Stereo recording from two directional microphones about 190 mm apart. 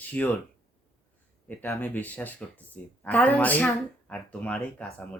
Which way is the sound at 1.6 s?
10° left (ahead or behind).